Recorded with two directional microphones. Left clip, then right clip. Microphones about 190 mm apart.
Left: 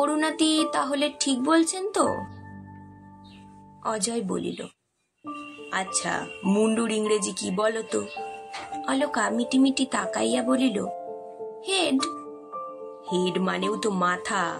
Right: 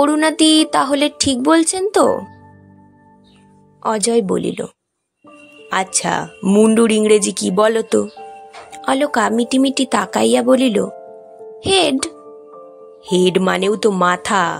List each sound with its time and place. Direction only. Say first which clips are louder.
0.0 s speech: right 10 dB; 45° right (ahead or behind)
3.8 s speech: right 12 dB; 45° right (ahead or behind)
5.7 s speech: right 10 dB; 50° right (ahead or behind)
13.1 s speech: right 11 dB; 50° right (ahead or behind)